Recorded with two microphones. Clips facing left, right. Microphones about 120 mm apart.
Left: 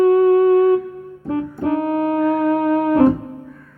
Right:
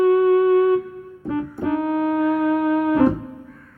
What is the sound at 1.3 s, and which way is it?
Music, 40° left (ahead or behind).